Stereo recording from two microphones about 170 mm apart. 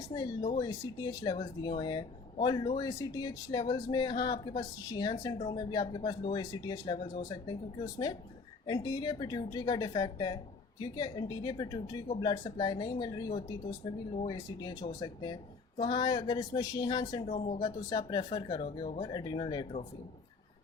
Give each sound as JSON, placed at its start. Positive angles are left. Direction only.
{"t": 0.1, "sound": "speech", "side_deg": 25}
{"t": 17.2, "sound": "speech", "side_deg": 40}
{"t": 17.6, "sound": "speech", "side_deg": 25}